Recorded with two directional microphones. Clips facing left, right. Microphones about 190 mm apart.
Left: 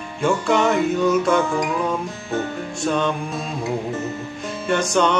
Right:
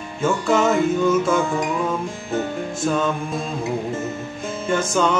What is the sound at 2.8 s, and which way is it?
Music, 5° right (ahead or behind).